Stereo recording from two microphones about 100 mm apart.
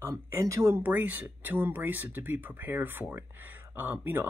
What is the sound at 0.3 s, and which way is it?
Speech, 30° right (ahead or behind).